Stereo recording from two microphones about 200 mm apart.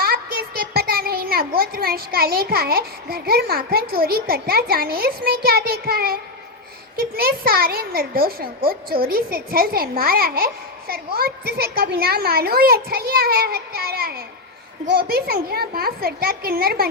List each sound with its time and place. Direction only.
0.0 s a child's voice: 50° right (ahead or behind)